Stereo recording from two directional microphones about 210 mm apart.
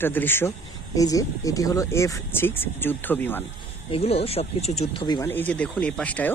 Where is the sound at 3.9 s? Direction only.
30° left (ahead or behind); by 6.3 s 5° left (ahead or behind).